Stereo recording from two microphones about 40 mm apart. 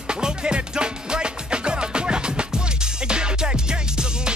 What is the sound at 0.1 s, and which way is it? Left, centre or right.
Music, right.